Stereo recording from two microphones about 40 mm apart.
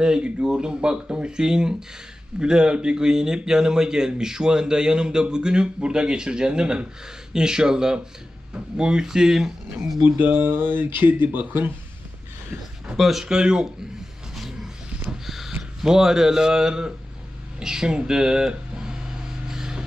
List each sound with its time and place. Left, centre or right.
0.0 s a man's voice: right
10.0 s speech: right
12.9 s speech: centre
14.3 s roaring cats: centre
15.2 s a sound: centre
15.8 s speech: centre
19.4 s a sound: centre